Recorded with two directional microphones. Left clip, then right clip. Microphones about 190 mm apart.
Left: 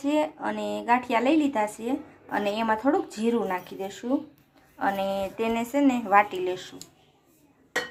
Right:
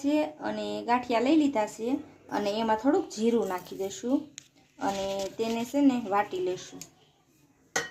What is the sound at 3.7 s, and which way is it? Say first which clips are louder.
Speech: even; centre (ahead or behind).